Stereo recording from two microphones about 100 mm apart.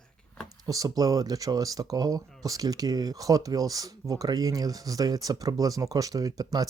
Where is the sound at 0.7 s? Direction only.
40° right (ahead or behind).